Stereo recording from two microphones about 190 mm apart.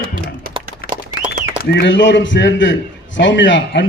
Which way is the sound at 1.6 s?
65° left (ahead or behind).